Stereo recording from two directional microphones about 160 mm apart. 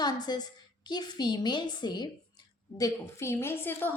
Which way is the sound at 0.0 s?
25° left (ahead or behind).